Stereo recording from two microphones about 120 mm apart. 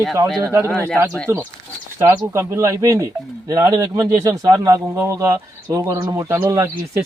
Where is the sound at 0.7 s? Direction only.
10° left (ahead or behind).